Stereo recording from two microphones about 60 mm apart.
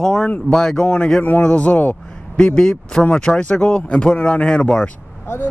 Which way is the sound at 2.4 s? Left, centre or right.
Centre.